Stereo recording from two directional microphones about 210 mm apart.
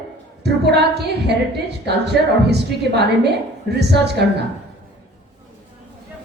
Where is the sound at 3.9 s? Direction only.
55° right (ahead or behind).